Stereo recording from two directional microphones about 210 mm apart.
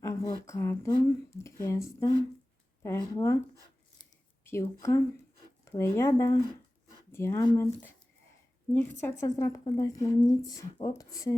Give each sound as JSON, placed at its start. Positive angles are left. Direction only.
{"t": 0.0, "sound": "speech", "side_deg": 15}
{"t": 4.4, "sound": "speech", "side_deg": 10}